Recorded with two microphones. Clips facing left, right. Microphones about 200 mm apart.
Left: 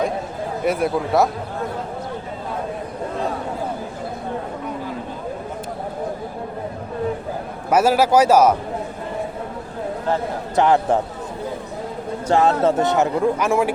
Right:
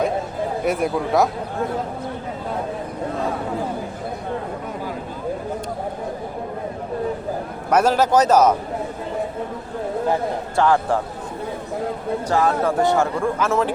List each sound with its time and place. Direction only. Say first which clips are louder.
0.6 s speech: left 2 dB; centre (ahead or behind)
7.7 s a man's voice: left 1 dB; 10° left (ahead or behind)
10.5 s speech: left 2 dB; 20° left (ahead or behind)
12.3 s speech: left 4 dB; 25° left (ahead or behind)